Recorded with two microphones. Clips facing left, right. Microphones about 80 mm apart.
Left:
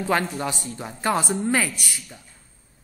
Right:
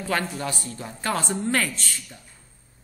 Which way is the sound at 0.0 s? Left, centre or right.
Left.